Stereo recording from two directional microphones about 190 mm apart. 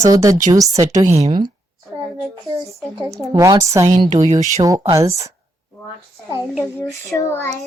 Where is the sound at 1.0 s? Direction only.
35° right (ahead or behind).